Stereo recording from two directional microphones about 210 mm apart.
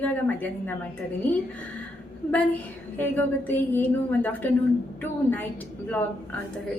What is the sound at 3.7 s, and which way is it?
Speech, 10° left (ahead or behind).